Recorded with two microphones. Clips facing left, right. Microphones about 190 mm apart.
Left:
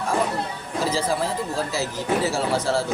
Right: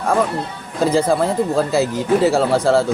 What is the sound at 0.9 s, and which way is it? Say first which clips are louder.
Speech: right 8 dB; 55° right (ahead or behind).